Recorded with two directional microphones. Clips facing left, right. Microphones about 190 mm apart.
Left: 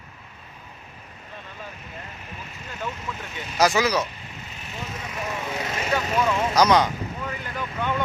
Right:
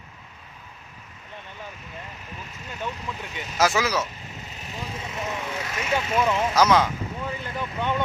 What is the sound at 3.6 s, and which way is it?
Speech, centre (ahead or behind).